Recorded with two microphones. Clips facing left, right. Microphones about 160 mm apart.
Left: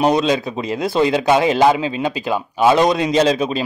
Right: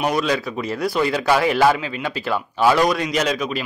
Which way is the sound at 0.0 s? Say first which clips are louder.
Left 5 dB; 25° left (ahead or behind).